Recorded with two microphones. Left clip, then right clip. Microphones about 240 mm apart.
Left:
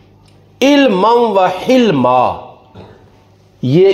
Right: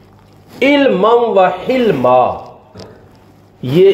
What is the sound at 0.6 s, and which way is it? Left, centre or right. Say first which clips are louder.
A man's voice: left 1 dB; left.